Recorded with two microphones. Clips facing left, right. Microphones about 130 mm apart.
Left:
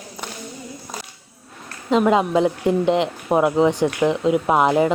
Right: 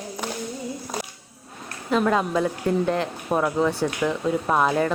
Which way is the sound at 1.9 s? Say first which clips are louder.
Left 5 dB; 20° left (ahead or behind).